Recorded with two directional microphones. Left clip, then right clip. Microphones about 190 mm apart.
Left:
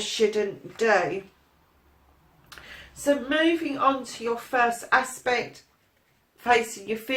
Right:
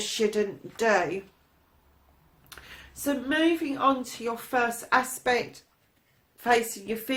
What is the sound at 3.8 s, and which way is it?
Speech, 45° right (ahead or behind).